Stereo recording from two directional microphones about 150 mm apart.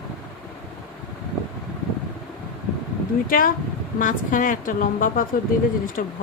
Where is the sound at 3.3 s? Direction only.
70° left (ahead or behind).